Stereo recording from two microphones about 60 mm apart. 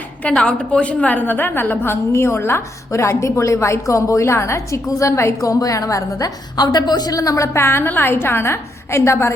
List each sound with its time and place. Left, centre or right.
0.2 s a woman's voice: centre; by 4.8 s left
4.9 s a woman's voice: left
7.4 s a woman's voice: left